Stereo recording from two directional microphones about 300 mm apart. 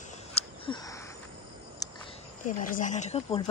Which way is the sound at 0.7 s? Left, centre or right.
Centre.